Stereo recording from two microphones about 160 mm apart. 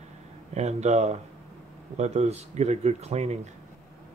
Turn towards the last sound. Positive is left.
turn(degrees=-45)  # may be behind; listen again after turning